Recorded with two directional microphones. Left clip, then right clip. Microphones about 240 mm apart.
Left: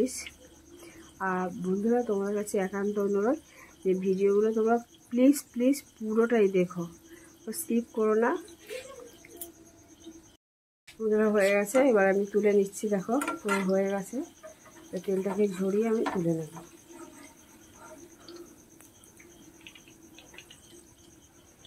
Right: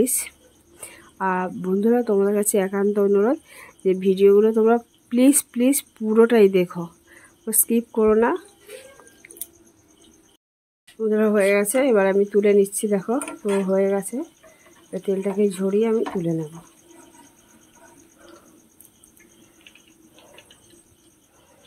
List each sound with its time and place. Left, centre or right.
0.0 s speech: right
11.1 s speech: right